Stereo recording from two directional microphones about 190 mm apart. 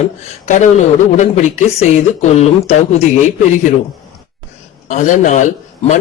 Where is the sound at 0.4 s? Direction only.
40° left (ahead or behind).